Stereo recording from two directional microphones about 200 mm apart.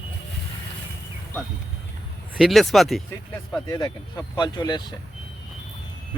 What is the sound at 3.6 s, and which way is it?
Speech, 20° left (ahead or behind).